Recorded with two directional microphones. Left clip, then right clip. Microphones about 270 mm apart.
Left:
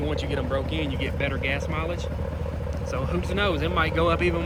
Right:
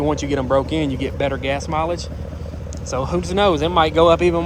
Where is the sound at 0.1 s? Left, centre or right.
Right.